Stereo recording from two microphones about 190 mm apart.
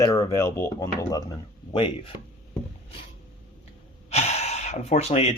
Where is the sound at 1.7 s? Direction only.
25° left (ahead or behind).